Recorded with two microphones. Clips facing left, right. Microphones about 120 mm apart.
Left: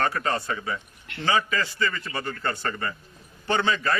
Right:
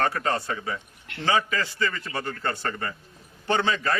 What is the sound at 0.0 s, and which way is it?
A man's voice, 35° right (ahead or behind).